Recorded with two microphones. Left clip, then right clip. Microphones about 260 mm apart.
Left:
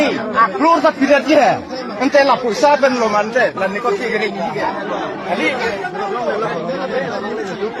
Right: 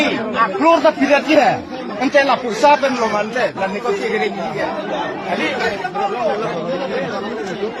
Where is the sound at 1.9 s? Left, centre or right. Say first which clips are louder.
Left 2 dB; centre.